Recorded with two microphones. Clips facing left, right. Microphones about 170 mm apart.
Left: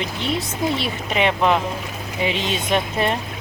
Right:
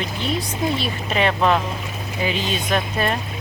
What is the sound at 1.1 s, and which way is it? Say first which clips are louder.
Speech: even; 15° left (ahead or behind).